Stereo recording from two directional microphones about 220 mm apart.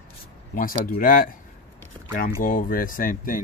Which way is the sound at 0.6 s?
40° left (ahead or behind).